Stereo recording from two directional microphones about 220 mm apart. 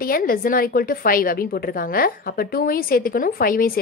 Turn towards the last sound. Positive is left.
turn(degrees=40)  # may be behind; listen again after turning